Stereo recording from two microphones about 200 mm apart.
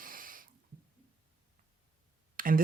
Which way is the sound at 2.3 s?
45° right (ahead or behind).